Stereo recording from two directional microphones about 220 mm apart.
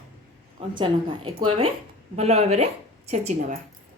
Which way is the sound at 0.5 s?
25° right (ahead or behind).